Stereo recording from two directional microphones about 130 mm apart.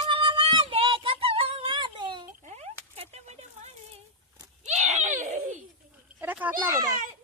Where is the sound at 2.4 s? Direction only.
55° right (ahead or behind); by 5.6 s 70° right (ahead or behind).